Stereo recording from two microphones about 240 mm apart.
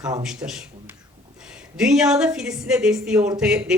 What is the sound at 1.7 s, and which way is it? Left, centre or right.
Speech, centre.